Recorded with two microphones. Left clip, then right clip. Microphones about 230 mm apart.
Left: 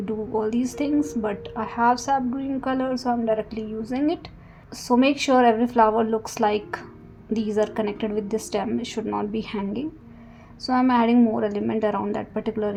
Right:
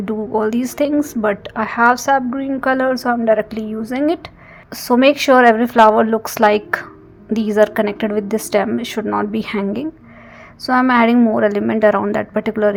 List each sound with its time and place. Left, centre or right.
0.0 s a woman's voice: right